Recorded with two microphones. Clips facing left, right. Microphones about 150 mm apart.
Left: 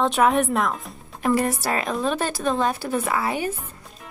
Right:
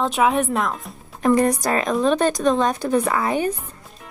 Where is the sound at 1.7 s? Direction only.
40° right (ahead or behind).